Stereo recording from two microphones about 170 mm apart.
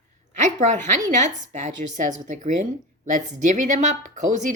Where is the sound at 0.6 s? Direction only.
45° right (ahead or behind).